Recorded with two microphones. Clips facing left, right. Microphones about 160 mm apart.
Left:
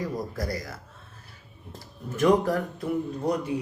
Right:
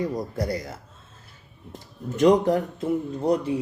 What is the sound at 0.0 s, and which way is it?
Speech, 25° right (ahead or behind).